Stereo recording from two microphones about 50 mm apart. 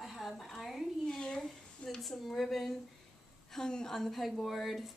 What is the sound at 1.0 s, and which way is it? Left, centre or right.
Speech, centre.